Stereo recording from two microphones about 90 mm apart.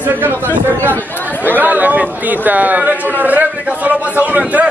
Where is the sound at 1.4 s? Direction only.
20° right (ahead or behind).